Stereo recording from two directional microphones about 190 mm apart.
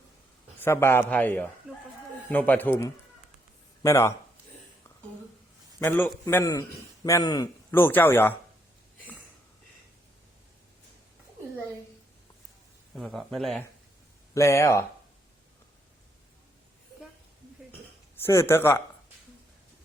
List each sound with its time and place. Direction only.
0.6 s a man's voice: 15° left (ahead or behind)
1.7 s chicken: 5° right (ahead or behind)
2.3 s a man's voice: 10° left (ahead or behind)
5.8 s a man's voice: 10° left (ahead or behind)
13.0 s speech: centre (ahead or behind)
14.3 s a man's voice: 15° left (ahead or behind)
18.2 s a man's voice: 15° left (ahead or behind)